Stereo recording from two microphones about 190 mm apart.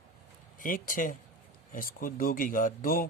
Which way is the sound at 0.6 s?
45° left (ahead or behind).